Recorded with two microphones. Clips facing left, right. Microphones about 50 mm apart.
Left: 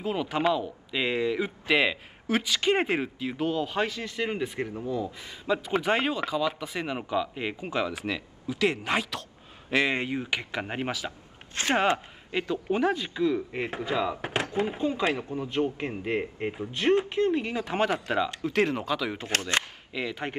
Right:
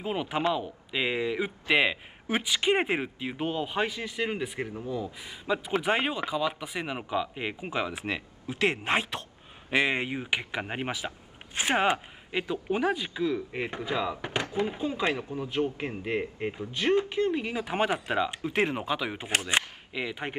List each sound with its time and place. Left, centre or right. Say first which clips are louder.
0.0 s speech: left 2 dB; centre
8.0 s speech: left 1 dB; right
9.7 s speech: left 1 dB; centre
15.9 s speech: left 1 dB; centre
17.1 s speech: left 2 dB; centre